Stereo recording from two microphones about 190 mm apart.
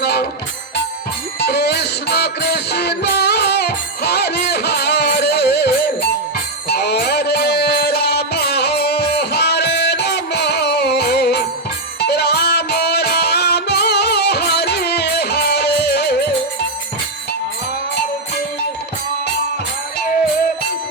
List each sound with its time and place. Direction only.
0.0 s music: 60° left (ahead or behind)
1.4 s music: 60° left (ahead or behind)